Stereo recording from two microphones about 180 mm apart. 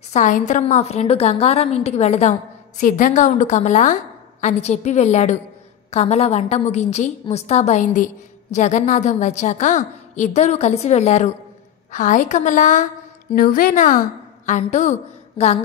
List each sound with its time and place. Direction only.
0.1 s a woman's voice: 45° left (ahead or behind)